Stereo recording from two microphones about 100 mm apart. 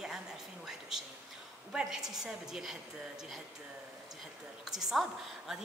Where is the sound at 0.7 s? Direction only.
5° right (ahead or behind).